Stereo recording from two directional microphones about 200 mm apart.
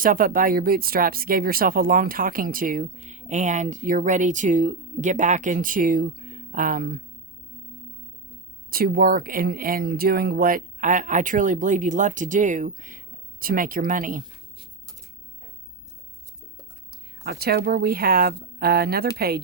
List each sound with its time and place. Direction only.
0.0 s speech: 45° right (ahead or behind)
8.7 s speech: 45° right (ahead or behind)
17.2 s speech: 50° right (ahead or behind)